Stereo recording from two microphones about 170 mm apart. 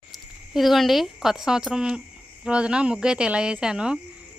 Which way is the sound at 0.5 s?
Centre (ahead or behind).